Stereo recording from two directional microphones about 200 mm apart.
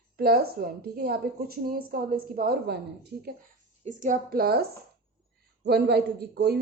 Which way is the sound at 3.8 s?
40° right (ahead or behind).